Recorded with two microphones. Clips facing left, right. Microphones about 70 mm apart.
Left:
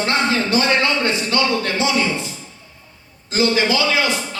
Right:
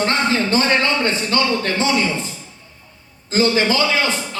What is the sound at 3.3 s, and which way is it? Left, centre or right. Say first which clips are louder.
Speech: right 1 dB; right.